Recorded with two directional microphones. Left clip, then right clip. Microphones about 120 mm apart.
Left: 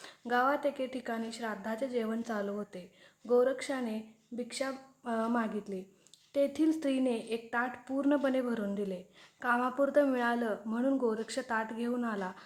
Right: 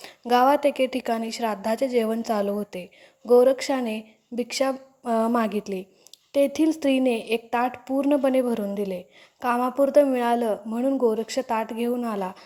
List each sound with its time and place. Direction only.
0.0 s a woman's voice: 55° right (ahead or behind)
6.3 s a woman's voice: 45° right (ahead or behind)